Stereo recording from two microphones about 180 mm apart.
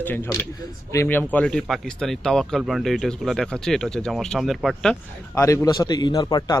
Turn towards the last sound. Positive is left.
turn(degrees=20)  # may be behind; listen again after turning